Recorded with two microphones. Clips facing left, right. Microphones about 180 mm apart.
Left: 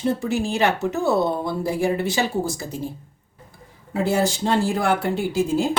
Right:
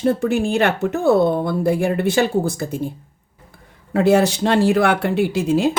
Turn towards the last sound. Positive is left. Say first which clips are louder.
# right 3 dB
turn(degrees=-70)  # may be behind; listen again after turning